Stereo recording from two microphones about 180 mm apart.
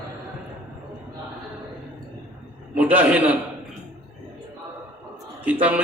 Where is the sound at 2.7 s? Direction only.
10° right (ahead or behind).